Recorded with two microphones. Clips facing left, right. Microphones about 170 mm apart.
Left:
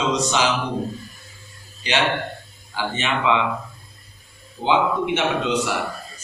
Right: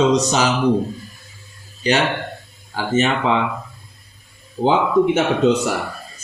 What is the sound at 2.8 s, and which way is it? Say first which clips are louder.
Speech: right 6 dB; 45° right (ahead or behind).